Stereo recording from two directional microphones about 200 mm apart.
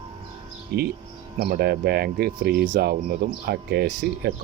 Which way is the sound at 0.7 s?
55° right (ahead or behind).